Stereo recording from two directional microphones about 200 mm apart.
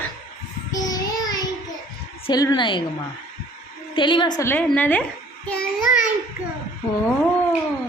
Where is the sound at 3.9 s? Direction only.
25° left (ahead or behind); by 5.1 s 5° left (ahead or behind).